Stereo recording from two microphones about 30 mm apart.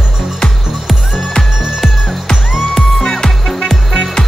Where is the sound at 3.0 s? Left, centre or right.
Left.